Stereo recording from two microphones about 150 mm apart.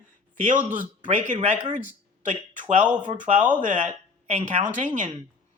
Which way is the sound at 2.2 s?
55° right (ahead or behind).